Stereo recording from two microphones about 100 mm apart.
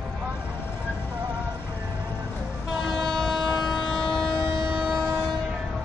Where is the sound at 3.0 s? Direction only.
Centre (ahead or behind).